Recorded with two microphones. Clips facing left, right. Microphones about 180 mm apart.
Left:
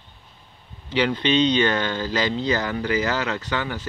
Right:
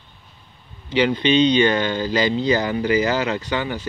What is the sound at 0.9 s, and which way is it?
Speech, 5° right (ahead or behind).